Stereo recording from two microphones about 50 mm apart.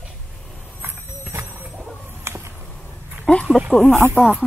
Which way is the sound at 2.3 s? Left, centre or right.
Right.